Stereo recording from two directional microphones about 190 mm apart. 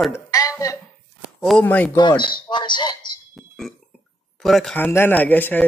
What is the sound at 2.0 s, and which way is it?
Speech, 25° left (ahead or behind).